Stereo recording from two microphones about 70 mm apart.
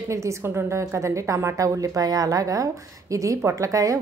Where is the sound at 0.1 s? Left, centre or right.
Right.